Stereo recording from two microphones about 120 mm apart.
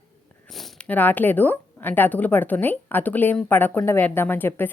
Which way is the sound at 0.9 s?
15° left (ahead or behind).